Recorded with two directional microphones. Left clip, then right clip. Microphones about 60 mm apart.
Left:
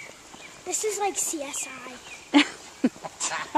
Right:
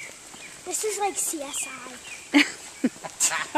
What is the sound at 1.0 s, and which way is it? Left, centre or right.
Speech, left.